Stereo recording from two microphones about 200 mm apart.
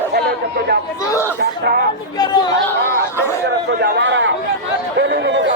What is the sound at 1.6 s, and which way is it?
Speech, 50° right (ahead or behind).